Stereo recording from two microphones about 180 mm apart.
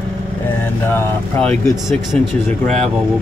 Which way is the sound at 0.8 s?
10° left (ahead or behind).